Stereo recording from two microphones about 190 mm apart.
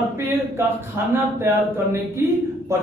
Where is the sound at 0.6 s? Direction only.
10° right (ahead or behind).